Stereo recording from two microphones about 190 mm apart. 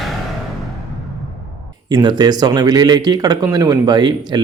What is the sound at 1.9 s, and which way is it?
Speech, 20° right (ahead or behind).